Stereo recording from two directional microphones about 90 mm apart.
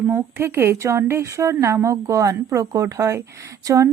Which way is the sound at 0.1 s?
25° right (ahead or behind).